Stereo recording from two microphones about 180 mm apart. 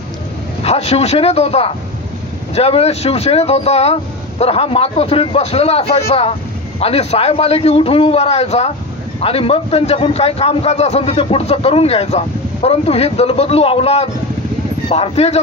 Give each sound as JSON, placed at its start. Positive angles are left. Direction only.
{"t": 0.6, "sound": "speech", "side_deg": 35}